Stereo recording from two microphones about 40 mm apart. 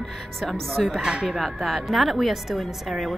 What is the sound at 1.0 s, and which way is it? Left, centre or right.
Speech, centre.